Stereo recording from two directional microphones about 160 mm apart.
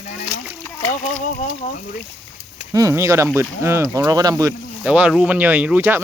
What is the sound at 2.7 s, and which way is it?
Speech, 20° right (ahead or behind).